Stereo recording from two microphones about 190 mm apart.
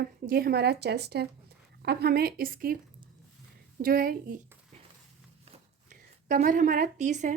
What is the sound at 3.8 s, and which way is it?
Speech, 50° right (ahead or behind).